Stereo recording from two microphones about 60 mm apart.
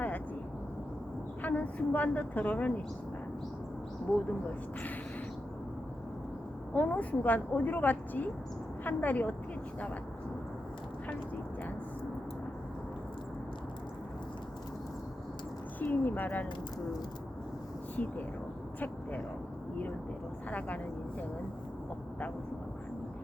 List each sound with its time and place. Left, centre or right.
1.4 s a woman's voice: left
6.7 s a woman's voice: left
15.8 s a woman's voice: left
17.9 s speech: left
20.5 s a woman's voice: left